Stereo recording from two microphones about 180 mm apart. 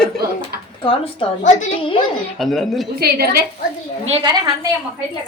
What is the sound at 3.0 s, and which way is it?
Speech, 60° right (ahead or behind).